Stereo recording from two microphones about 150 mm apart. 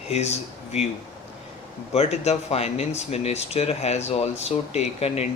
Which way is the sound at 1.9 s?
45° left (ahead or behind).